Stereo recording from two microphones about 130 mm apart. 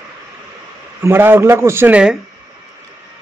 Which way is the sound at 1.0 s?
15° right (ahead or behind).